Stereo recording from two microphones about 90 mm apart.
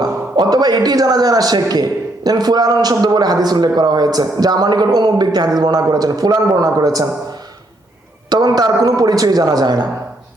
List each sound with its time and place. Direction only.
0.0 s a man's voice: 45° right (ahead or behind)
8.3 s a man's voice: 45° right (ahead or behind)